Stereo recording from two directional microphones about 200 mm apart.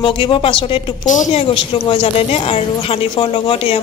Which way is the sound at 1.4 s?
25° left (ahead or behind).